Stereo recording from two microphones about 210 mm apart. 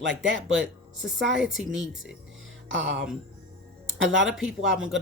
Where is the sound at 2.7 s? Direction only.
60° right (ahead or behind).